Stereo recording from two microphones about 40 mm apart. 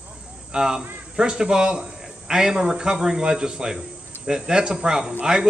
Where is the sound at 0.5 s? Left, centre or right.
Centre.